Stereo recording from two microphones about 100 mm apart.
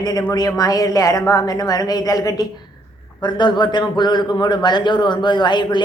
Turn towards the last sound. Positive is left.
turn(degrees=50)  # may be behind; listen again after turning